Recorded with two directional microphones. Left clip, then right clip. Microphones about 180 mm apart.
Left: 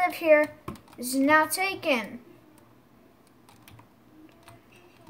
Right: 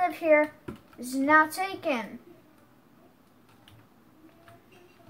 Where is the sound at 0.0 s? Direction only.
20° left (ahead or behind).